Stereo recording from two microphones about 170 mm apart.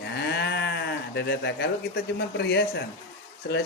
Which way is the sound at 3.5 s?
90° left.